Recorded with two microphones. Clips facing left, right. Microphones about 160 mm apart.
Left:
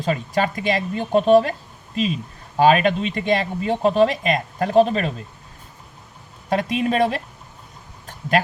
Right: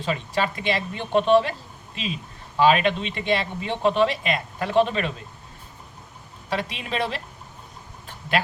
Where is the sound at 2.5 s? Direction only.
45° left (ahead or behind).